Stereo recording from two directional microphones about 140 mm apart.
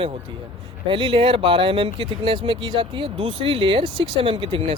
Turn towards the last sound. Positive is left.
turn(degrees=-40)  # may be behind; listen again after turning